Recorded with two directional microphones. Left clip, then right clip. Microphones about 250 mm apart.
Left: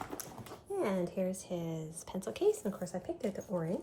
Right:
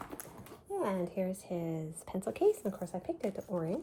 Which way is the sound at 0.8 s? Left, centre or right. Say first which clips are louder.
Even; centre.